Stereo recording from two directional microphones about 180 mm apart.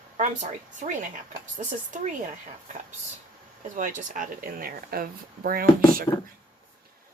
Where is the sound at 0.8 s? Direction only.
45° right (ahead or behind).